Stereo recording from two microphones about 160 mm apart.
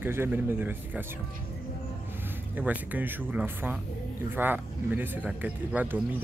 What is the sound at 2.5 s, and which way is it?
Speech, 10° right (ahead or behind).